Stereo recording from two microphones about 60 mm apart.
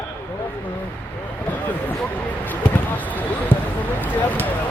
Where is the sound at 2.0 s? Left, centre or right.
Left.